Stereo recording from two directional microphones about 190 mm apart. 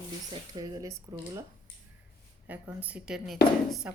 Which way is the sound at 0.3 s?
20° right (ahead or behind).